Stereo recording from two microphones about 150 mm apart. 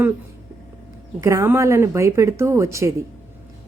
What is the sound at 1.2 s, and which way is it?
A woman's voice, 20° right (ahead or behind).